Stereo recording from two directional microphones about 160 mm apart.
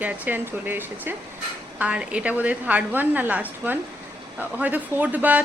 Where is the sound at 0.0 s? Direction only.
10° right (ahead or behind).